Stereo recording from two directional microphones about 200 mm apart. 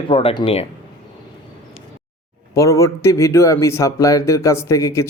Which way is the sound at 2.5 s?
15° left (ahead or behind).